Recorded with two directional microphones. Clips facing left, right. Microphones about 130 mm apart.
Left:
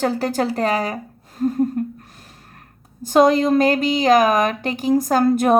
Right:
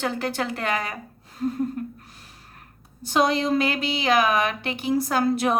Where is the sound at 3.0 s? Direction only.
45° left (ahead or behind).